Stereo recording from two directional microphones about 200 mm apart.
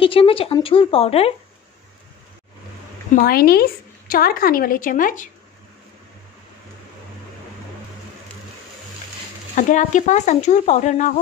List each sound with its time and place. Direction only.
0.0 s speech: 25° left (ahead or behind)
3.2 s a woman's voice: 50° left (ahead or behind)
9.6 s speech: 40° left (ahead or behind)